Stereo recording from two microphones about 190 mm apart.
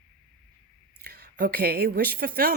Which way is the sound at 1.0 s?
50° right (ahead or behind).